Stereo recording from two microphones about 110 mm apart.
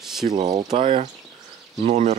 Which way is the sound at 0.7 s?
70° right (ahead or behind).